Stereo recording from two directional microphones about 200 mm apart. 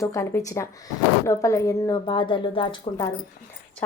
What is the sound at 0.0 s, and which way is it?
A woman's voice, 15° left (ahead or behind).